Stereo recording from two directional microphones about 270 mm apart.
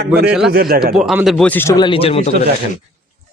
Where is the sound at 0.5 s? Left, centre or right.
Right.